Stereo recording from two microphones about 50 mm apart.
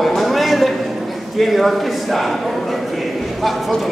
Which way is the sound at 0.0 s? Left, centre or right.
Centre.